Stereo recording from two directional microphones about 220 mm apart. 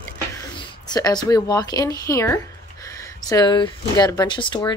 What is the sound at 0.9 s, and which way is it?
Speech, 20° left (ahead or behind).